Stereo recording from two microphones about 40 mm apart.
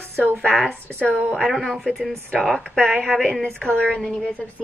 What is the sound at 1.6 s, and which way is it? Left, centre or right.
A woman's voice, centre.